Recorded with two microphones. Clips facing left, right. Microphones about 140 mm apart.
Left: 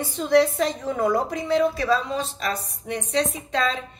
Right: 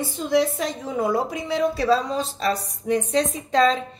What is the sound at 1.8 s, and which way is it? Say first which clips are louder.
A woman's voice: right 2 dB; 35° right (ahead or behind).